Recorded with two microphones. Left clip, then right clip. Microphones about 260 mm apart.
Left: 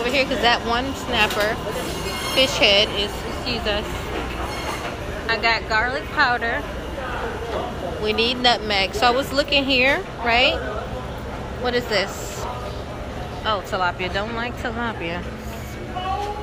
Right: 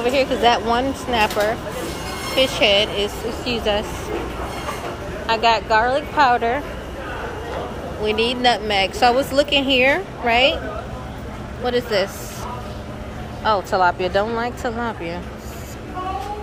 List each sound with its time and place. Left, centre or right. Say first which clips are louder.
0.0 s a woman's voice: right 2 dB; centre
5.2 s speech: right 3 dB; centre
8.0 s a woman's voice: right 1 dB; centre
11.6 s a woman's voice: right 2 dB; centre
13.4 s a woman's voice: right 5 dB; centre